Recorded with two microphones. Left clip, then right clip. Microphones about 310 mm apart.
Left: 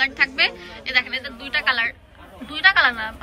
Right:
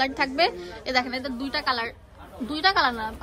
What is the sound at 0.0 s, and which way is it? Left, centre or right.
A woman's voice, centre.